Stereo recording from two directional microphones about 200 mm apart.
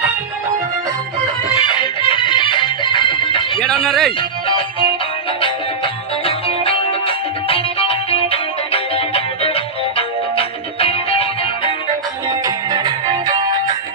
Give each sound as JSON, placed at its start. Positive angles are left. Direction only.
{"t": 1.6, "sound": "music", "side_deg": 25}
{"t": 3.6, "sound": "speech", "side_deg": 5}
{"t": 4.2, "sound": "music", "side_deg": 25}
{"t": 12.3, "sound": "music", "side_deg": -20}